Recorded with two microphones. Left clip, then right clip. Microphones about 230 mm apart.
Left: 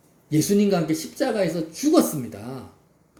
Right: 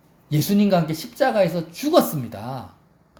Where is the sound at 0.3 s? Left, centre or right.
Right.